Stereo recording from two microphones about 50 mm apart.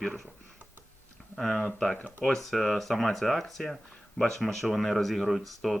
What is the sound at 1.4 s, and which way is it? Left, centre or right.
A man's voice, centre.